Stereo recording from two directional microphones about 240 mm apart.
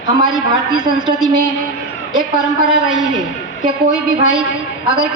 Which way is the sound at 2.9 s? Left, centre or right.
Centre.